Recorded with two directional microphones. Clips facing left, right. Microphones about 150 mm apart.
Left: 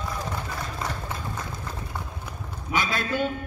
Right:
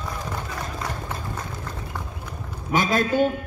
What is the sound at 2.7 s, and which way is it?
Speech, 45° right (ahead or behind).